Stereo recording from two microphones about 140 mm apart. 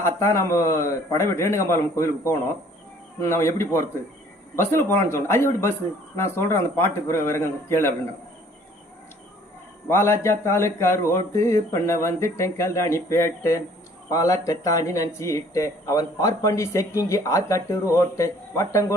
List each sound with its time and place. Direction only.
0.0 s a man's voice: 20° left (ahead or behind)
9.9 s speech: 20° left (ahead or behind)